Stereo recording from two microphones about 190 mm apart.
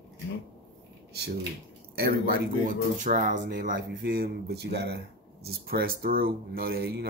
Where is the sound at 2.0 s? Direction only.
55° right (ahead or behind).